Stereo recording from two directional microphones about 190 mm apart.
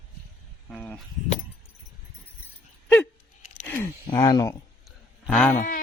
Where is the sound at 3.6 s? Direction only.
10° left (ahead or behind).